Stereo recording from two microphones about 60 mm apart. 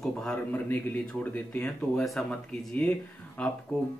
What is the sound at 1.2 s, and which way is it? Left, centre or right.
Speech, left.